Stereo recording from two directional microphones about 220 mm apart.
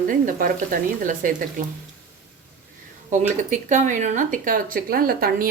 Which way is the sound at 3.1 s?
35° right (ahead or behind).